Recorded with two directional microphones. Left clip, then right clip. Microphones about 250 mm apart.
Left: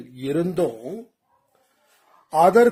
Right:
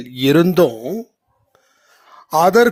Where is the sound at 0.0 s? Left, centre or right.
Right.